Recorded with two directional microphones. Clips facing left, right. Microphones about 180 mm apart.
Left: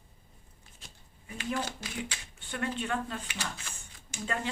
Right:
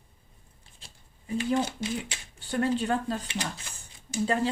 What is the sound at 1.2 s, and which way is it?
Speech, 30° right (ahead or behind).